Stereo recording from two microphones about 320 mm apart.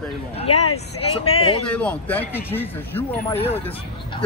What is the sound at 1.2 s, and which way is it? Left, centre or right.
Speech, centre.